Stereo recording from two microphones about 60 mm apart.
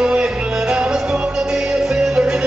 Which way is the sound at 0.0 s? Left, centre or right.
Centre.